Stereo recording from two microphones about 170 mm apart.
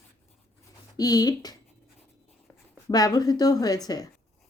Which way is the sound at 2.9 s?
20° left (ahead or behind).